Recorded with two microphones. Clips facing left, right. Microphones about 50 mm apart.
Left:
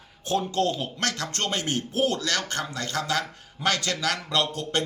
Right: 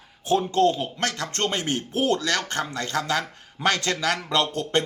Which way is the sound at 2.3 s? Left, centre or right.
Centre.